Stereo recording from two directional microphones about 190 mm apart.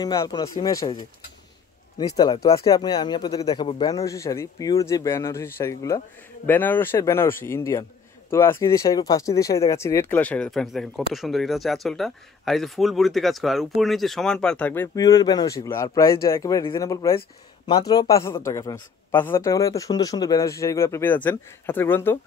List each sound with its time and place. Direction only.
0.0 s speech: 20° left (ahead or behind)
2.0 s speech: 20° left (ahead or behind)
3.9 s speech: 15° left (ahead or behind)